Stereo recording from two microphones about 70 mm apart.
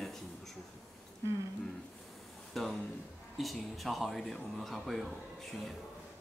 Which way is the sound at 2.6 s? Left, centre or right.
Centre.